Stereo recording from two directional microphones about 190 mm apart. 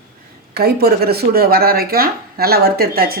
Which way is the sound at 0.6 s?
55° right (ahead or behind).